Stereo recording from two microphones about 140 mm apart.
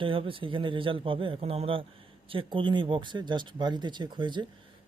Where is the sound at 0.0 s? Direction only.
40° right (ahead or behind).